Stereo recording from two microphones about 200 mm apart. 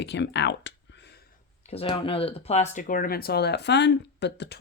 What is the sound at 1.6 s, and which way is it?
Speech, 25° left (ahead or behind).